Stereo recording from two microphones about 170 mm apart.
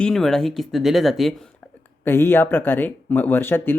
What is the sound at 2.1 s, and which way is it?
Speech, 15° left (ahead or behind).